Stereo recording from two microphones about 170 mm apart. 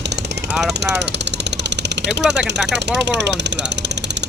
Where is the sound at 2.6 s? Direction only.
90° right.